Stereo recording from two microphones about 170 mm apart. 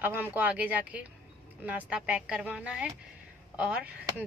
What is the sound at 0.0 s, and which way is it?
Speech, 10° right (ahead or behind).